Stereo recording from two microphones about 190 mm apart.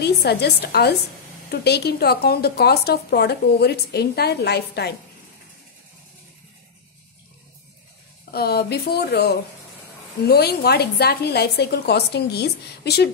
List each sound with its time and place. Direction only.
0.0 s a woman's voice: 60° left (ahead or behind)
8.3 s a woman's voice: 55° left (ahead or behind)